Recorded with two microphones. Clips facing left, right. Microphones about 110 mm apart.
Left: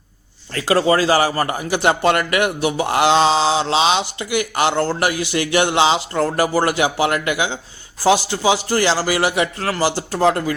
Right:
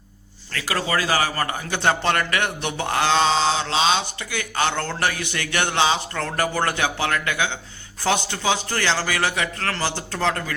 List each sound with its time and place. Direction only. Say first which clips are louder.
0.5 s speech: left 8 dB; 30° left (ahead or behind)